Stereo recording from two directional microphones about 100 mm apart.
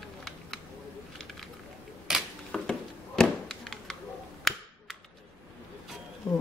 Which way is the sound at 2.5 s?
5° left (ahead or behind).